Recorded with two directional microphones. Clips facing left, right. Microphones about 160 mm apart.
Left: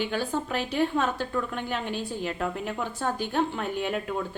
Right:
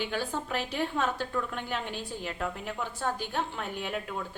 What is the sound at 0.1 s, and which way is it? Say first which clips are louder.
A woman's voice: left 4 dB; centre (ahead or behind).